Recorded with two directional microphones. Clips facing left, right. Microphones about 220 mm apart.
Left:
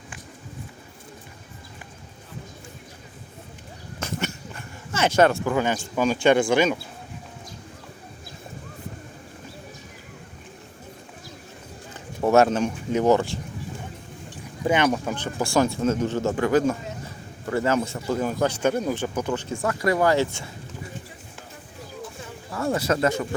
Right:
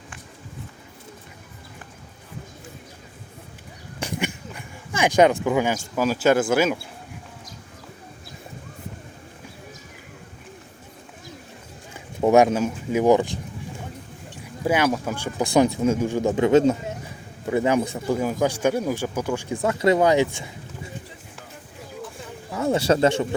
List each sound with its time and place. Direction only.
4.0 s speech: 15° right (ahead or behind)
11.9 s speech: 15° right (ahead or behind)
14.6 s speech: 5° right (ahead or behind)
19.6 s speech: 20° right (ahead or behind)
22.5 s speech: 20° right (ahead or behind)
22.8 s speech: 30° right (ahead or behind)